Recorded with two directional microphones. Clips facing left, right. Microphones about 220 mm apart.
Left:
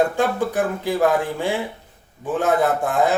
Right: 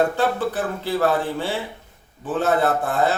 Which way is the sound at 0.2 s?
15° left (ahead or behind).